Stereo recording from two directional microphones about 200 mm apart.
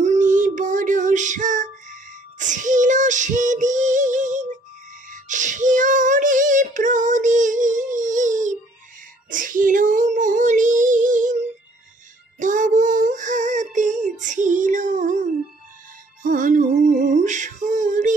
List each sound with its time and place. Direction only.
0.0 s child singing: 35° right (ahead or behind)
12.4 s child singing: 40° right (ahead or behind)
16.2 s music: 40° right (ahead or behind)
17.1 s a sound: 40° right (ahead or behind)